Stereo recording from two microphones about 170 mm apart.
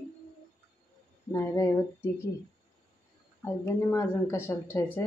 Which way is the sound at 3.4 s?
15° left (ahead or behind).